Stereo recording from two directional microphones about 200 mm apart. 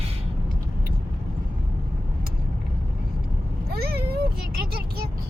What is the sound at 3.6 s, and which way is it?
Meow, 50° right (ahead or behind).